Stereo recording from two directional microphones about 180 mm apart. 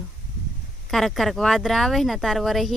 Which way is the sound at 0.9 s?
Centre (ahead or behind).